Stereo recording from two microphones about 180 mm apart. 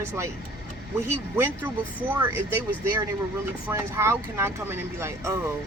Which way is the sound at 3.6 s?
15° right (ahead or behind).